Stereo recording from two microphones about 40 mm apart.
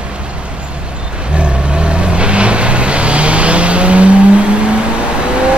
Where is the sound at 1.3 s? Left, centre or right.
Right.